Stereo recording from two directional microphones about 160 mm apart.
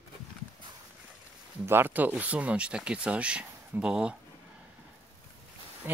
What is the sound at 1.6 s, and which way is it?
Speech, 15° right (ahead or behind).